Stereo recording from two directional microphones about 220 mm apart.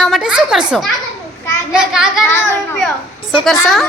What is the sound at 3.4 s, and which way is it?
Speech, centre (ahead or behind).